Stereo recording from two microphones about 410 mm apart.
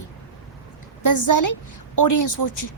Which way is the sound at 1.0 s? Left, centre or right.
Left.